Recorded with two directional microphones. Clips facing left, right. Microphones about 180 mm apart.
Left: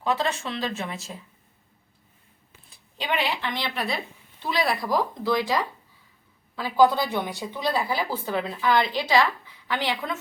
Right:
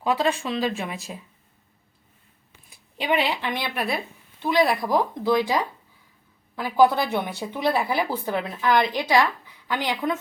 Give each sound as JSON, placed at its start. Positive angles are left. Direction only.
{"t": 0.0, "sound": "a woman's voice", "side_deg": -15}
{"t": 2.6, "sound": "a woman's voice", "side_deg": -15}